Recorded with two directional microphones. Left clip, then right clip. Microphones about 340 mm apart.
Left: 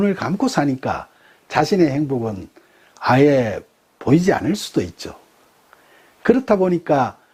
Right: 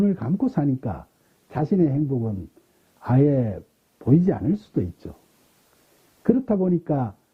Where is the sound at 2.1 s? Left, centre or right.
Centre.